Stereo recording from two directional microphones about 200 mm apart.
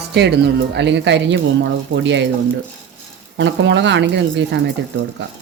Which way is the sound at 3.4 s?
65° right (ahead or behind).